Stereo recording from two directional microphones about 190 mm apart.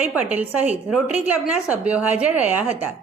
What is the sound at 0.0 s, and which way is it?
A woman's voice, 5° right (ahead or behind).